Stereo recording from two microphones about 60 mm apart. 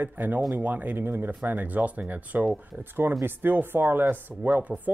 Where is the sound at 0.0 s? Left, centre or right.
Right.